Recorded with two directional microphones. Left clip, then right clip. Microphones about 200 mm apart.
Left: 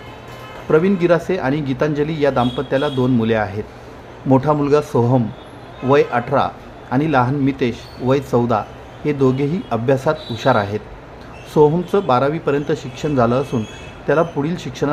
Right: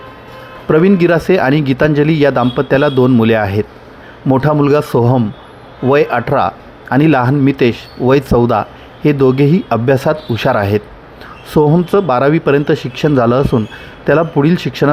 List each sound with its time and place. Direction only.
0.7 s speech: 30° right (ahead or behind)